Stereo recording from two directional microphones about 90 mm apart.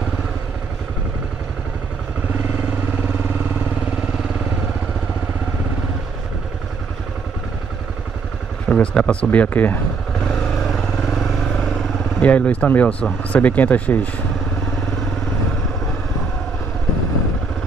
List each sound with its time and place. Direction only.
3.0 s vehicle: 25° right (ahead or behind)
8.6 s speech: 10° left (ahead or behind)
10.2 s vehicle: 10° left (ahead or behind)
12.2 s speech: 15° left (ahead or behind)